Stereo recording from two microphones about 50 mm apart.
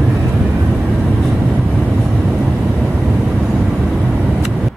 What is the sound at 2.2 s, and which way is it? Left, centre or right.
Vehicle, right.